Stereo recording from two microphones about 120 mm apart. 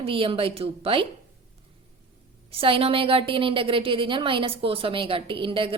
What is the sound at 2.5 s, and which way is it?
A woman's voice, 50° right (ahead or behind).